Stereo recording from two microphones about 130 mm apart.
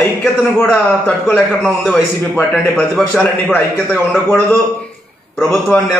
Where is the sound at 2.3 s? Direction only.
15° left (ahead or behind).